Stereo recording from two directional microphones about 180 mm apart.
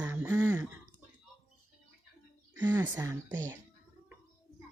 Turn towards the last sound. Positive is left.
turn(degrees=-15)  # may be behind; listen again after turning